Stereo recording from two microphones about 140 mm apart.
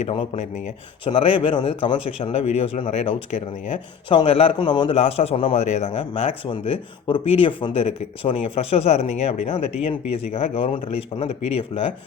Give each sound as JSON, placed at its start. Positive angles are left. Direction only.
{"t": 0.0, "sound": "speech", "side_deg": 45}
{"t": 4.1, "sound": "a man's voice", "side_deg": 40}
{"t": 4.9, "sound": "speech", "side_deg": 45}
{"t": 6.5, "sound": "speech", "side_deg": 40}